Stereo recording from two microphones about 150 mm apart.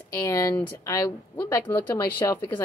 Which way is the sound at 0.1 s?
20° left (ahead or behind).